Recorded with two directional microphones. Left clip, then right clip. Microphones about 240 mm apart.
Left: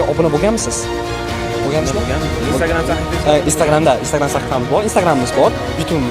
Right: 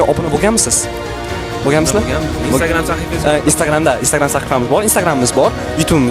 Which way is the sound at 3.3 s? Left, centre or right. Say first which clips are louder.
Left 1 dB; right.